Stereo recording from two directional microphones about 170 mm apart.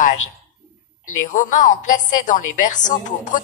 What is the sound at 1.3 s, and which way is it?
A woman's voice, 50° left (ahead or behind).